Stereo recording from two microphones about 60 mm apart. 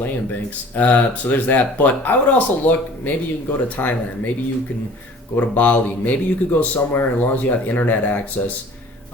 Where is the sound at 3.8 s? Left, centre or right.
Left.